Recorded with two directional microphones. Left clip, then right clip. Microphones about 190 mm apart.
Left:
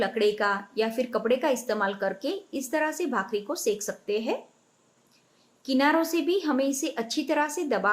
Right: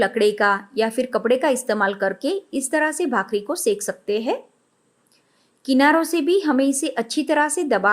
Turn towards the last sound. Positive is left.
turn(degrees=-45)  # may be behind; listen again after turning